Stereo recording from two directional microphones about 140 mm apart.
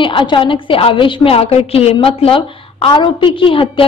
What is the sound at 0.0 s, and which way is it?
A woman's voice, 35° left (ahead or behind).